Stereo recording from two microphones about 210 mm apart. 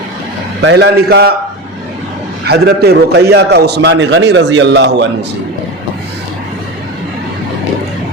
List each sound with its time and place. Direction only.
0.6 s a man's voice: 55° right (ahead or behind)
2.4 s a man's voice: 50° right (ahead or behind)